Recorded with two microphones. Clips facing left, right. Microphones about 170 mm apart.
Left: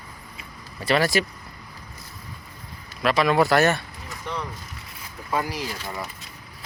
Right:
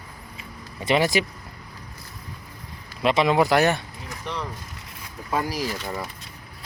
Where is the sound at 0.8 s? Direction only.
20° right (ahead or behind).